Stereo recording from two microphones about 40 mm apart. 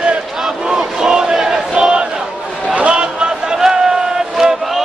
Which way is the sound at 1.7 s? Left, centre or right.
Right.